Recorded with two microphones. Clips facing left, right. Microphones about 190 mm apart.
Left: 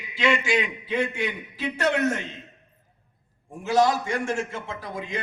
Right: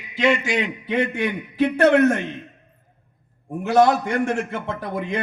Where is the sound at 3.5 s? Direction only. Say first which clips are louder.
Right 5 dB; 60° right (ahead or behind).